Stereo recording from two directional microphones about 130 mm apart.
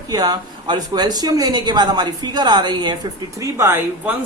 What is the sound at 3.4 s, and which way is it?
Speech, 20° right (ahead or behind).